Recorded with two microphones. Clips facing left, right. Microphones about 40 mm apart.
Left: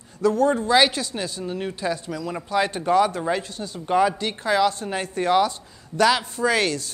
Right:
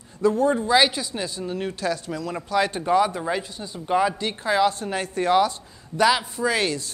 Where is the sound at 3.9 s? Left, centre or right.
Centre.